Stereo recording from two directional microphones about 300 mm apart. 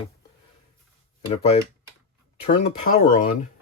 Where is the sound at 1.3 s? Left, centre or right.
Left.